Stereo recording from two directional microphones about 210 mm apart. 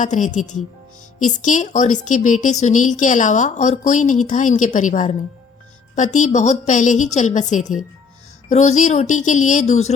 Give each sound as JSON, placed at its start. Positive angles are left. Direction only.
{"t": 0.0, "sound": "a woman's voice", "side_deg": 35}